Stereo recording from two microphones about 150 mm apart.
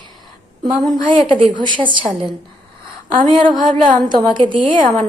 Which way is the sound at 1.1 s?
35° right (ahead or behind).